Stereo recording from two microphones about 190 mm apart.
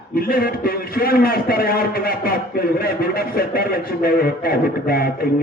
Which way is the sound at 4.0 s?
50° left (ahead or behind).